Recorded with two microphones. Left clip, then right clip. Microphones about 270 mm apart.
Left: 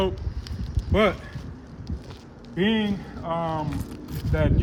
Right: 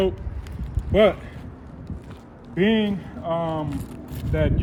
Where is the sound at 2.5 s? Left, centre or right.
Centre.